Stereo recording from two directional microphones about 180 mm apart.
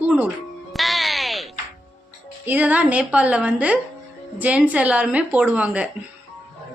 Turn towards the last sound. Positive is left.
turn(degrees=-5)  # may be behind; listen again after turning